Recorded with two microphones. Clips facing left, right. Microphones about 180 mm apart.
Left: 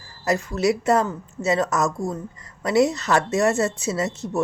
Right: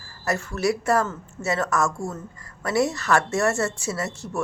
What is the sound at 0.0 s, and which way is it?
A woman's voice, 20° left (ahead or behind).